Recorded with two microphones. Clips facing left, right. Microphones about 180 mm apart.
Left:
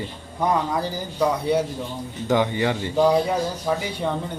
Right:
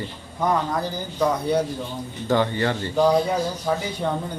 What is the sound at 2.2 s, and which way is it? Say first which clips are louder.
A man's voice: left 1 dB; 15° left (ahead or behind).